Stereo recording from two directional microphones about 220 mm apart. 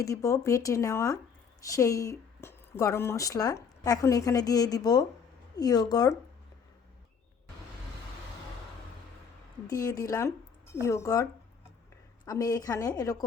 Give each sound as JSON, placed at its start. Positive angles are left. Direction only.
{"t": 0.0, "sound": "speech", "side_deg": 15}
{"t": 9.6, "sound": "speech", "side_deg": 15}